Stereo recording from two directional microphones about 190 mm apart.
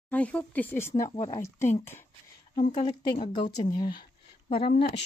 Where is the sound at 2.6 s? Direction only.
30° left (ahead or behind).